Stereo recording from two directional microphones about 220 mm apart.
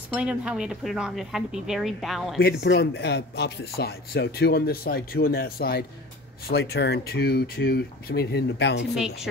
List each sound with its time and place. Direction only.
0.1 s speech: 5° right (ahead or behind)
2.6 s speech: 50° left (ahead or behind)
8.9 s speech: centre (ahead or behind)